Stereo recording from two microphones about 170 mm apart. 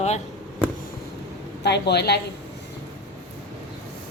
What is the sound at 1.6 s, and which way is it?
Speech, 75° left (ahead or behind).